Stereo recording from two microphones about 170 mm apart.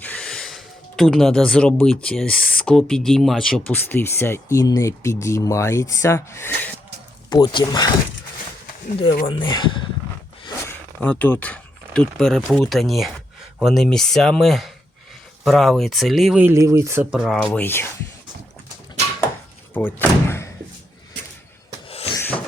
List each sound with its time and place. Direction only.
0.0 s speech: 5° left (ahead or behind)
7.3 s speech: 25° left (ahead or behind)
9.2 s speech: 30° left (ahead or behind)
10.7 s a sound: 10° left (ahead or behind)
12.5 s speech: centre (ahead or behind)
16.5 s speech: 15° right (ahead or behind)
17.1 s speech: 5° right (ahead or behind); by 17.8 s 10° left (ahead or behind)
19.7 s speech: 10° left (ahead or behind)
21.8 s a sound: 35° left (ahead or behind)
22.1 s a sound: 10° left (ahead or behind)